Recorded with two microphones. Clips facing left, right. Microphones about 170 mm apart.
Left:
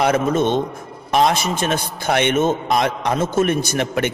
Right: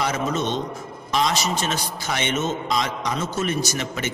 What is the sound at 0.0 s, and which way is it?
A man's voice, 55° left (ahead or behind).